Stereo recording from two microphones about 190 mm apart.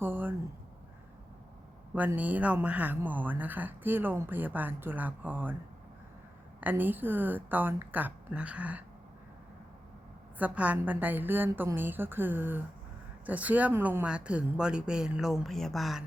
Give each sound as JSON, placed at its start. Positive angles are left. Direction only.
{"t": 0.0, "sound": "a sound", "side_deg": -10}
{"t": 2.0, "sound": "speech", "side_deg": -10}
{"t": 6.6, "sound": "speech", "side_deg": -10}
{"t": 10.3, "sound": "speech", "side_deg": -10}